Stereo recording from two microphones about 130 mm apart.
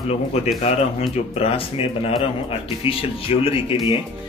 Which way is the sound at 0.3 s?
55° left (ahead or behind).